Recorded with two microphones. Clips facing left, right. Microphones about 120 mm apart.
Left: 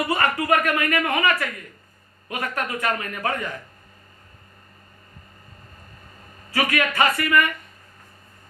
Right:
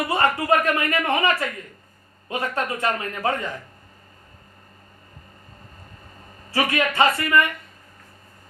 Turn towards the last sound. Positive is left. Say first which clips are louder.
# right 1 dB
turn(degrees=-25)  # may be behind; listen again after turning